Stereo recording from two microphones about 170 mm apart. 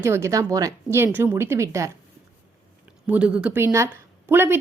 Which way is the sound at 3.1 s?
5° right (ahead or behind).